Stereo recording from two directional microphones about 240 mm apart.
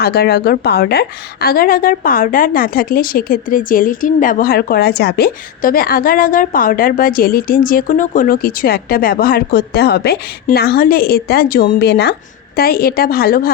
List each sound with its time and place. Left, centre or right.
0.0 s a woman's voice: left